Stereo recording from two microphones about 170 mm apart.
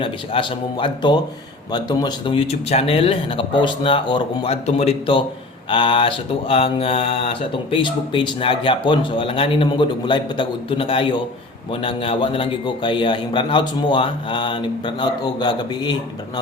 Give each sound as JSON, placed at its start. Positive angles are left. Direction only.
{"t": 0.0, "sound": "a man's voice", "side_deg": 30}